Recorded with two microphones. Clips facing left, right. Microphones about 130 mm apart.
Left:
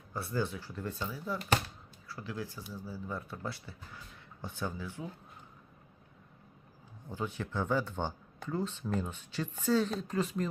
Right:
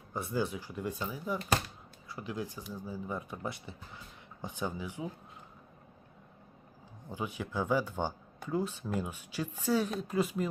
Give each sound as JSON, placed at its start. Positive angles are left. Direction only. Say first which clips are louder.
{"t": 0.1, "sound": "speech", "louder": "right 1 dB", "side_deg": -15}
{"t": 7.1, "sound": "speech", "louder": "even", "side_deg": -15}